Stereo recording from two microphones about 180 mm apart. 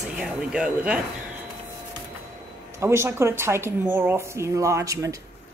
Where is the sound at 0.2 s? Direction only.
5° right (ahead or behind).